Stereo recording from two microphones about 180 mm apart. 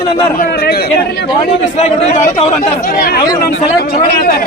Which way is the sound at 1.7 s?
40° left (ahead or behind).